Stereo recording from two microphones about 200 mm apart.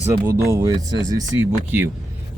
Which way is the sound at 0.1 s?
15° right (ahead or behind).